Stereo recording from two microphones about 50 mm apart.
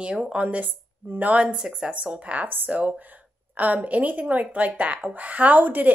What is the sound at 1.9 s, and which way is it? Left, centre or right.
Speech, right.